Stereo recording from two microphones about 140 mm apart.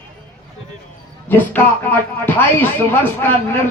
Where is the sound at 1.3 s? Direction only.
15° left (ahead or behind).